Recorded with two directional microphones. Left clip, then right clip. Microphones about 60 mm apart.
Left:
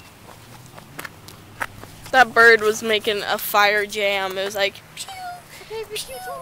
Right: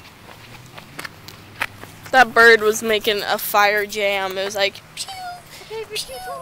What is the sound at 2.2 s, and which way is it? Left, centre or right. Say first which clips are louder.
Speech: right 1 dB; right.